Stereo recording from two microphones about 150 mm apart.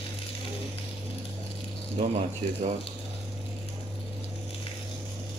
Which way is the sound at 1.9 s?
50° right (ahead or behind).